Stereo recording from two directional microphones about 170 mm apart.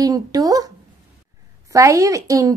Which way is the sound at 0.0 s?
20° right (ahead or behind).